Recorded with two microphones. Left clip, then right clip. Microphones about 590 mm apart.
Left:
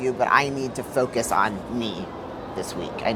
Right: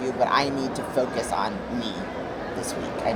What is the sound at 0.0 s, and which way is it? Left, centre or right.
Speech, left.